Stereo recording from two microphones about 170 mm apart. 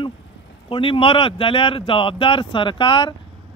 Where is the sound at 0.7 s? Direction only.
30° left (ahead or behind).